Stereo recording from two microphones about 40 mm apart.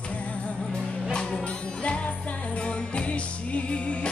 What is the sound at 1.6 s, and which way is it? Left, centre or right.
Music, left.